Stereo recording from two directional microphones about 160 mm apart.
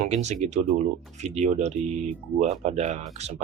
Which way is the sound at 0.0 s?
45° right (ahead or behind).